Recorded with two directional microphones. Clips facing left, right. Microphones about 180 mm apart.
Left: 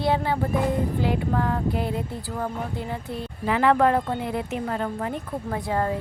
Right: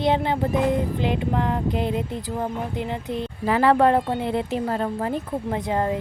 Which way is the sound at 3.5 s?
35° right (ahead or behind).